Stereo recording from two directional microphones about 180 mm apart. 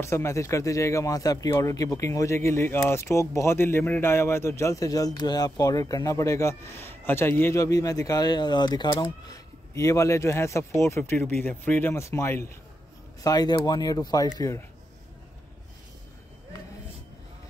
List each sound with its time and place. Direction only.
0.0 s speech: 15° left (ahead or behind)